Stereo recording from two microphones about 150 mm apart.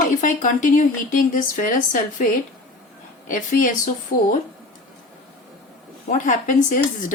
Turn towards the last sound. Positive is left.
turn(degrees=60)  # may be behind; listen again after turning